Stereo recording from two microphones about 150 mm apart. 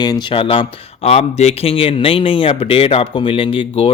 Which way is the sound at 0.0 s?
30° left (ahead or behind).